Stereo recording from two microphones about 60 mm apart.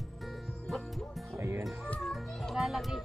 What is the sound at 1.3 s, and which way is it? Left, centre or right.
Music, right.